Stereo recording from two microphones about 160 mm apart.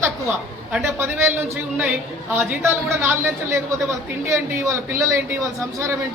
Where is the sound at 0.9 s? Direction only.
15° right (ahead or behind).